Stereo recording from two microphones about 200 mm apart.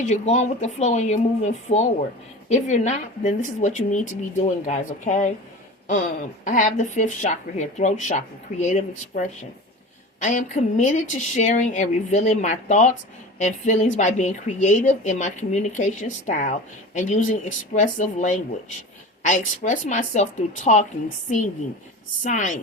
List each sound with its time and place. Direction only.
0.1 s a woman's voice: 35° left (ahead or behind)
6.4 s a woman's voice: 40° left (ahead or behind)
22.2 s a woman's voice: 40° left (ahead or behind)